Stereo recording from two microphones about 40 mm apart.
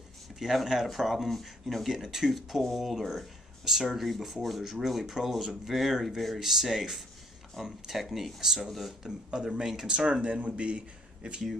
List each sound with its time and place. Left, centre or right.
0.4 s speech: centre
2.0 s speech: centre
9.3 s speech: centre
9.8 s speech: right